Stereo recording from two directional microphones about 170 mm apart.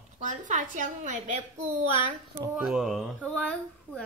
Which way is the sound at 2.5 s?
5° right (ahead or behind).